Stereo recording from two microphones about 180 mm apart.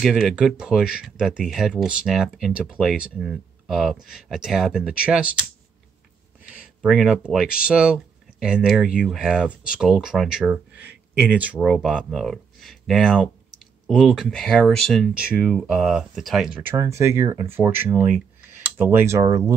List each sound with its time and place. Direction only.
0.0 s speech: centre (ahead or behind)
6.4 s speech: 5° right (ahead or behind)
16.6 s speech: 15° right (ahead or behind)